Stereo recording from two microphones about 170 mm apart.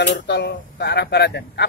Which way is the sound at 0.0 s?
90° left.